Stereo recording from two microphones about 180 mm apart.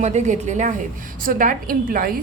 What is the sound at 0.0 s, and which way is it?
A woman's voice, 40° right (ahead or behind).